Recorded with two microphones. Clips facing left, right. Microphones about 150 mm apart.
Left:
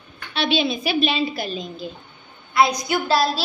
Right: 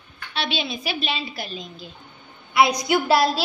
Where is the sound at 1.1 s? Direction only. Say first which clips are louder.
Left 6 dB; 30° left (ahead or behind).